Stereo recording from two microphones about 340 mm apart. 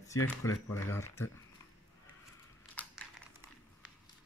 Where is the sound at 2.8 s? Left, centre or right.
Centre.